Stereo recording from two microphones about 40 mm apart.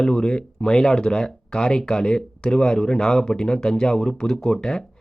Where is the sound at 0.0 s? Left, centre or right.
Centre.